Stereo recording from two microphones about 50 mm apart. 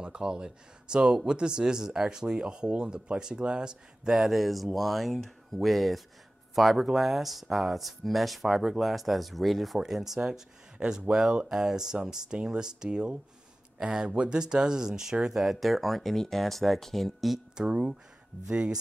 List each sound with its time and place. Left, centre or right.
0.0 s speech: centre
4.2 s speech: centre
15.4 s speech: centre
17.6 s speech: centre